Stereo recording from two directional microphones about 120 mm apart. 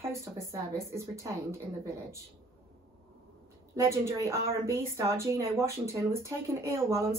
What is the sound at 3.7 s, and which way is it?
Speech, 25° right (ahead or behind).